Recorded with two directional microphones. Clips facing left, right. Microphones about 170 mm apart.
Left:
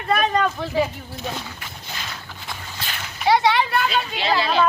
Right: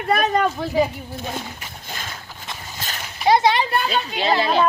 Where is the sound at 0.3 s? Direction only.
15° right (ahead or behind).